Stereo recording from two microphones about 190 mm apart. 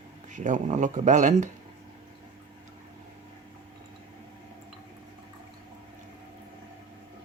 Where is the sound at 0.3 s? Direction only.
40° right (ahead or behind).